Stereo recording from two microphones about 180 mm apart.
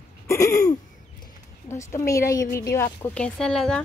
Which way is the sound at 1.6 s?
15° left (ahead or behind).